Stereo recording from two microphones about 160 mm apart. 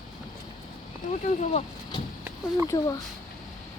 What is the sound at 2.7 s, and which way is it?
Speech, 20° left (ahead or behind).